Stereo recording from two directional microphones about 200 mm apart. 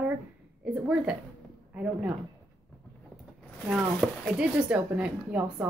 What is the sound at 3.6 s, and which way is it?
Speech, centre (ahead or behind).